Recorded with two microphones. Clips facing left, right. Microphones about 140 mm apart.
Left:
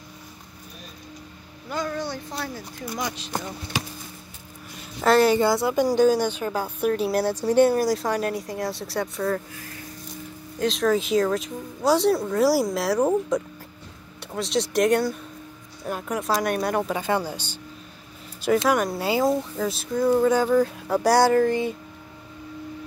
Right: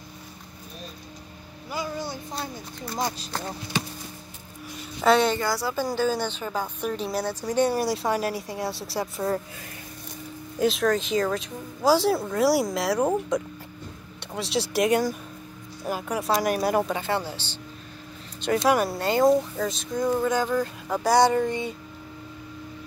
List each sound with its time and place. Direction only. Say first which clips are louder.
1.7 s a sound: left 3 dB; 10° right (ahead or behind)
3.0 s speech: right 3 dB; 35° right (ahead or behind)
5.0 s speech: left 2 dB; centre (ahead or behind)
5.4 s a woman's voice: left 6 dB; 20° left (ahead or behind)
7.6 s speech: left 3 dB; centre (ahead or behind)
10.6 s speech: left 1 dB; 5° right (ahead or behind)
16.9 s a woman's voice: left 2 dB; 15° left (ahead or behind)
18.4 s speech: left 1 dB; centre (ahead or behind)